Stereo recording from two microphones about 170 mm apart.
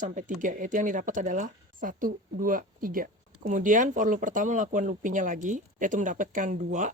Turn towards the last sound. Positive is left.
turn(degrees=-45)  # may be behind; listen again after turning